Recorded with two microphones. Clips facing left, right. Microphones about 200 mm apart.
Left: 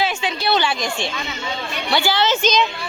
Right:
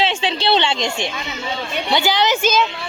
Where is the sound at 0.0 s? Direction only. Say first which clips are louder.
Right 2 dB; 30° right (ahead or behind).